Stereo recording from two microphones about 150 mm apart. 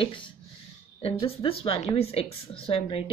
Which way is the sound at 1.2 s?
40° left (ahead or behind).